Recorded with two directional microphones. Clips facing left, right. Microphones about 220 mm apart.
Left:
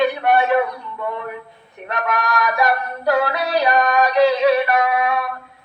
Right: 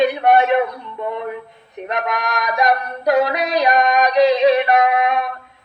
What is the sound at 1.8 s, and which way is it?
Music, 20° right (ahead or behind).